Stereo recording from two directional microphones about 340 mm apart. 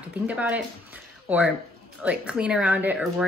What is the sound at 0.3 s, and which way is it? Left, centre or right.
Speech, centre.